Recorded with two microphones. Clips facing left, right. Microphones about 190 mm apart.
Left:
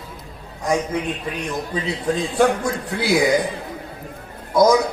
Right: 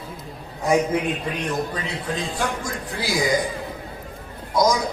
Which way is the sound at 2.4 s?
65° left (ahead or behind).